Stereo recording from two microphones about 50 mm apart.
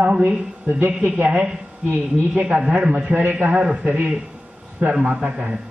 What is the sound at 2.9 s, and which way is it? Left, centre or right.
A man's voice, right.